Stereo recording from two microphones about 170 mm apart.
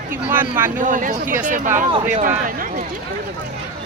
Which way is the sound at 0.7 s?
50° right (ahead or behind).